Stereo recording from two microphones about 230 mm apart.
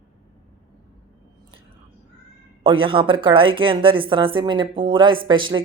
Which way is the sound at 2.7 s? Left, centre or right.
Right.